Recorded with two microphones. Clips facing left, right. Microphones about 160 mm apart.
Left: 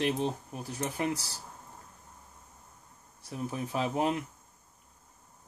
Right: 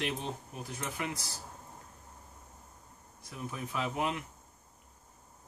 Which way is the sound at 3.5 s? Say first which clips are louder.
Left 4 dB; 35° left (ahead or behind).